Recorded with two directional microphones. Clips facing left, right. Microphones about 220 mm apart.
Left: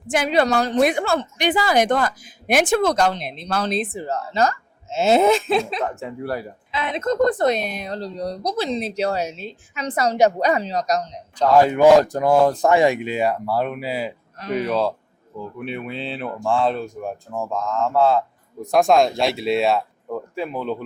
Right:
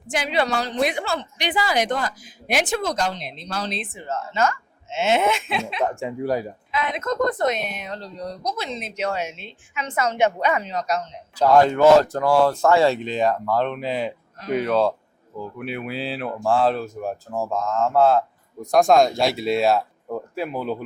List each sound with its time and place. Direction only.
0.1 s a woman's voice: 45° left (ahead or behind)
3.9 s speech: 35° left (ahead or behind)
5.8 s speech: 15° right (ahead or behind)
6.7 s speech: 30° left (ahead or behind)
11.5 s speech: 15° left (ahead or behind); by 20.8 s 5° right (ahead or behind)